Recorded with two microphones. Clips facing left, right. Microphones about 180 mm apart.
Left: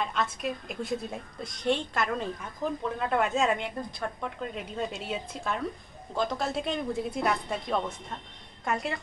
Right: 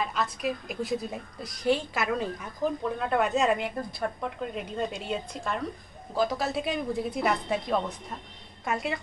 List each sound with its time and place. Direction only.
0.0 s a woman's voice: centre (ahead or behind)